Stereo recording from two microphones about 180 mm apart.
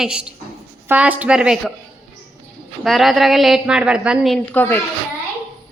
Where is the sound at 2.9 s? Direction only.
Centre (ahead or behind).